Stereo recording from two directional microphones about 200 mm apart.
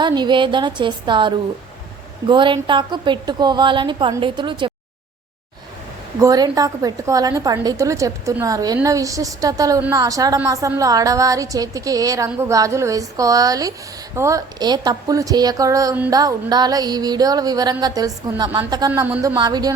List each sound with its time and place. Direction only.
0.0 s speech: 20° right (ahead or behind)
6.1 s a woman's voice: 20° right (ahead or behind)
19.4 s speech: 20° right (ahead or behind)